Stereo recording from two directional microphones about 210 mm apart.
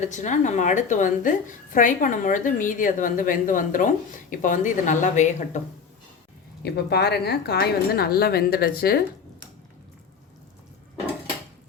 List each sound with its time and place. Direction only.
0.1 s a woman's voice: 35° left (ahead or behind)
6.6 s a woman's voice: 50° left (ahead or behind)